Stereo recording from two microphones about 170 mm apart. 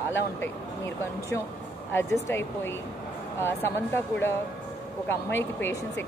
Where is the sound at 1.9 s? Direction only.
15° left (ahead or behind).